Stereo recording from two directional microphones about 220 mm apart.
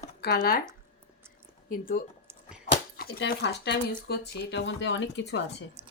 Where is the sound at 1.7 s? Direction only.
40° left (ahead or behind).